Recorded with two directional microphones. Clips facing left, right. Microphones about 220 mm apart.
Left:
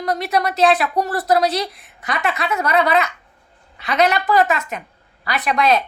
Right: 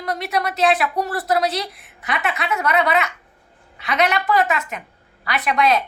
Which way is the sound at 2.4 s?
40° left (ahead or behind).